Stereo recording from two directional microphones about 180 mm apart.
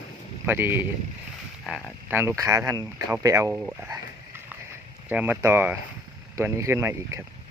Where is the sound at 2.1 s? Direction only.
15° right (ahead or behind).